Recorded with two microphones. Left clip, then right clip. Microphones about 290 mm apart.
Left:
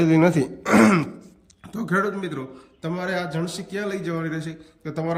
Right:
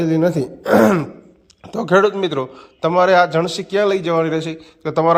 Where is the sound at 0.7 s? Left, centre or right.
Centre.